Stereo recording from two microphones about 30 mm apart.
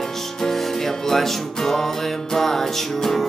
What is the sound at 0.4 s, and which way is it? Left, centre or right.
Music, centre.